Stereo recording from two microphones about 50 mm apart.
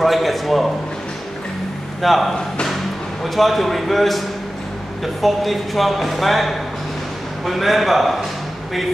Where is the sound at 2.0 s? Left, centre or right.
Centre.